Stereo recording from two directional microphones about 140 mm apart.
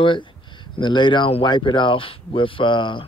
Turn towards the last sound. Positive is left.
turn(degrees=35)  # may be behind; listen again after turning